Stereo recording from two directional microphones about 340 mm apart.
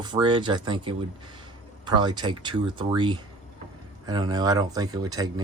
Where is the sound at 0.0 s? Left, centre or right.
Centre.